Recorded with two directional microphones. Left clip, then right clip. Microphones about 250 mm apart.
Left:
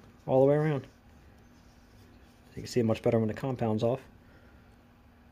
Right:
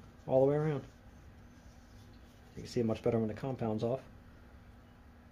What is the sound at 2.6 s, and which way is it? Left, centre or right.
Speech, left.